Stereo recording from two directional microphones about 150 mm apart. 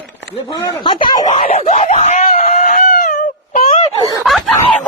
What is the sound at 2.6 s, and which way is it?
Chicken, 70° left (ahead or behind).